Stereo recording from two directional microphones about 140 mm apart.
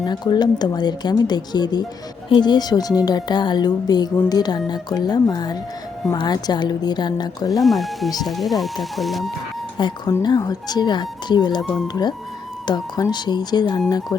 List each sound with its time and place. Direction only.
0.0 s speech: 30° left (ahead or behind)
7.6 s speech: centre (ahead or behind)
9.8 s speech: 35° left (ahead or behind)
11.6 s speech: centre (ahead or behind)
12.6 s speech: 30° left (ahead or behind)